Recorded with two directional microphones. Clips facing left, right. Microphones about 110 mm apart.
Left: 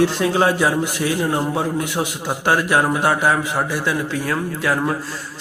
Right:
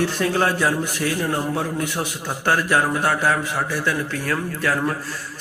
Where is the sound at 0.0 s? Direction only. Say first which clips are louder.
Left 4 dB; 15° left (ahead or behind).